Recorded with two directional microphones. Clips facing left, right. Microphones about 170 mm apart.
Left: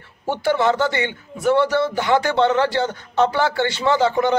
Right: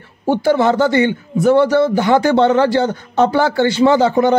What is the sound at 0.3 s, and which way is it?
A man's voice, 40° right (ahead or behind).